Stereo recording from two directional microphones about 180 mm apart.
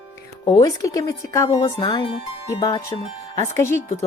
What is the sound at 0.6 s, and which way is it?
Speech, 20° left (ahead or behind).